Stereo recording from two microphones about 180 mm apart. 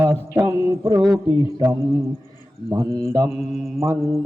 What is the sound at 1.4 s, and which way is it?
A man's voice, 20° right (ahead or behind).